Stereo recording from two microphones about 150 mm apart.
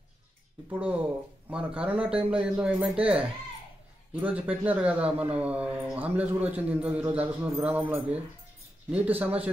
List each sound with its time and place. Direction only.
0.7 s a man's voice: 10° right (ahead or behind)